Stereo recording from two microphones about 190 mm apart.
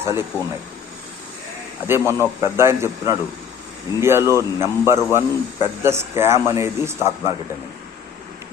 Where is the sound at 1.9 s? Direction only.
15° right (ahead or behind).